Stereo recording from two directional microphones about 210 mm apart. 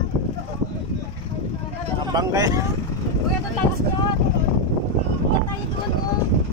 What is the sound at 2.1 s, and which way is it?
Speech, 20° right (ahead or behind).